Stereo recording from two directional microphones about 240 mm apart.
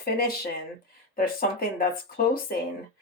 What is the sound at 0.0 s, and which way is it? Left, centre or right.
Speech, left.